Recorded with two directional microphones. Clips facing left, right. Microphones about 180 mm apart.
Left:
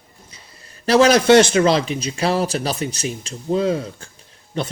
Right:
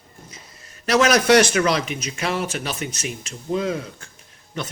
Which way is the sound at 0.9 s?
30° left (ahead or behind).